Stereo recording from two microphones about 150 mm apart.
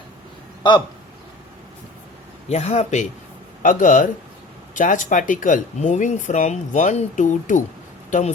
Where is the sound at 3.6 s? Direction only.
60° left (ahead or behind).